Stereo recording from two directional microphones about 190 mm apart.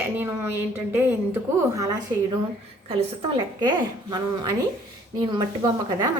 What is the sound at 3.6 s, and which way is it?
A woman's voice, 20° right (ahead or behind).